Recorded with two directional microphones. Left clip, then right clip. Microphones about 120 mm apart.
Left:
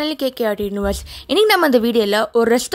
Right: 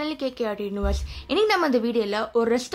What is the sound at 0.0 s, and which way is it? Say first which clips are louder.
A woman's voice: left 8 dB; 75° left (ahead or behind).